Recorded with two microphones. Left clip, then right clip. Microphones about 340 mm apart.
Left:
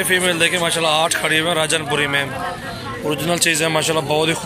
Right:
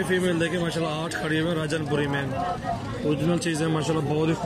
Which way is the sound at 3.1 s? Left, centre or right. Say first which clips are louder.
Left 8 dB; centre.